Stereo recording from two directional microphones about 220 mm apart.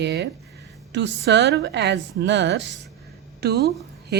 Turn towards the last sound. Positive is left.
turn(degrees=-50)  # may be behind; listen again after turning